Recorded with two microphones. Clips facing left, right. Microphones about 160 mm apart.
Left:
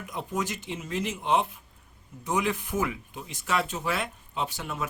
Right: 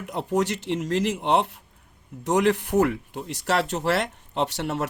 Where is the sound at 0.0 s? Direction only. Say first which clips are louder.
Right 7 dB; 70° right (ahead or behind).